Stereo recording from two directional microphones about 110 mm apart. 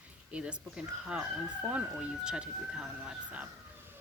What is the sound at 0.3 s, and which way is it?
Speech, 10° right (ahead or behind).